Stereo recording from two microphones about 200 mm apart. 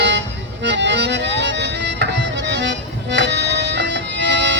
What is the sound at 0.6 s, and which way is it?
Music, 60° right (ahead or behind).